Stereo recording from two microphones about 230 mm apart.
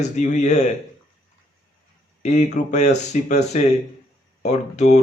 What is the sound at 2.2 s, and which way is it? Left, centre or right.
Speech, left.